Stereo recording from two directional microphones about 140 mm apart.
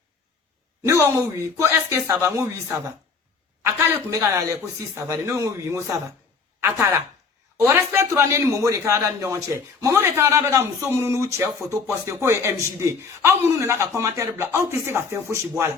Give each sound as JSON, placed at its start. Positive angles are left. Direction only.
{"t": 0.9, "sound": "a man's voice", "side_deg": -20}